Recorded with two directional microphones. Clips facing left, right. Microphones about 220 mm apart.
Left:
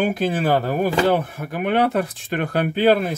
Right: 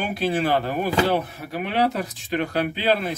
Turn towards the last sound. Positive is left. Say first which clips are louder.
# left 6 dB
turn(degrees=50)  # may be behind; listen again after turning